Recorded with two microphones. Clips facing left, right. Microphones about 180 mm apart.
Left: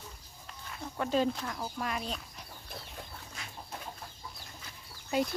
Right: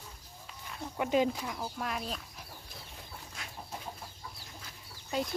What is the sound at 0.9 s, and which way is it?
Speech, 15° right (ahead or behind).